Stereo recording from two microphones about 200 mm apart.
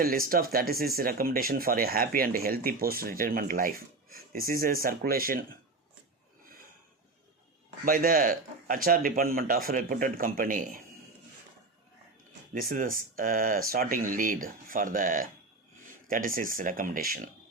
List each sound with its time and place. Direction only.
0.0 s speech: 45° right (ahead or behind)
7.9 s speech: 45° right (ahead or behind)
12.5 s speech: 45° right (ahead or behind)